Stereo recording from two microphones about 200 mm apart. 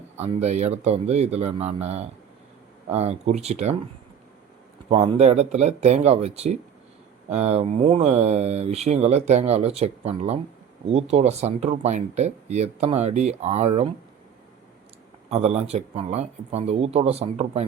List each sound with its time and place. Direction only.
0.2 s speech: 35° right (ahead or behind)
4.9 s speech: 30° right (ahead or behind)
15.3 s speech: 30° right (ahead or behind)